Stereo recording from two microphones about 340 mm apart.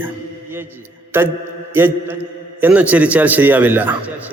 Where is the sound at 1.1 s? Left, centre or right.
Centre.